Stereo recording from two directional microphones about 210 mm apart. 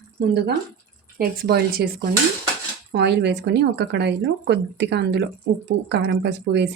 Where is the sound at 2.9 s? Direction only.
50° right (ahead or behind).